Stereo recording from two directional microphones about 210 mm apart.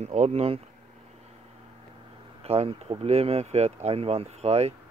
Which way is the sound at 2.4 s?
30° right (ahead or behind).